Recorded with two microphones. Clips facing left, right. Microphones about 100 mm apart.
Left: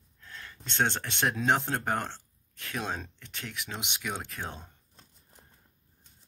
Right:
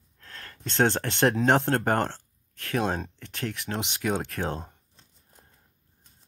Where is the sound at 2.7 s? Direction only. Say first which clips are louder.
Right 8 dB; 55° right (ahead or behind); by 4.6 s 80° right.